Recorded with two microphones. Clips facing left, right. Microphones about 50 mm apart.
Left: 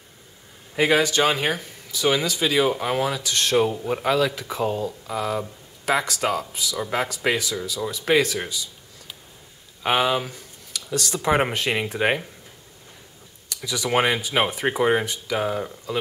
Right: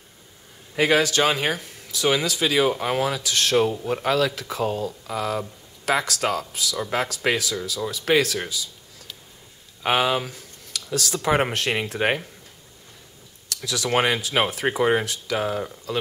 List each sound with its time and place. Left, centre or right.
0.7 s speech: centre
13.5 s speech: centre